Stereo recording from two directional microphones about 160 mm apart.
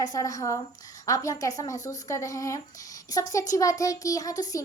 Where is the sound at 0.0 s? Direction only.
20° left (ahead or behind).